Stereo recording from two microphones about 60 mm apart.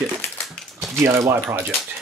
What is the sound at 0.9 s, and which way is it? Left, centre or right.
Speech, right.